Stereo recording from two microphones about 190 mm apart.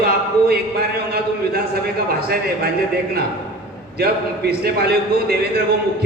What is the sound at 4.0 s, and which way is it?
A man's voice, 55° right (ahead or behind).